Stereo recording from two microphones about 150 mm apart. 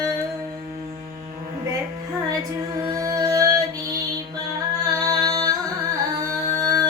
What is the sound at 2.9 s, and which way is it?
Music, 25° right (ahead or behind).